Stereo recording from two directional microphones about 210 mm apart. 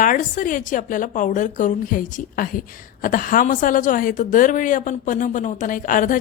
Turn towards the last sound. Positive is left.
turn(degrees=40)  # may be behind; listen again after turning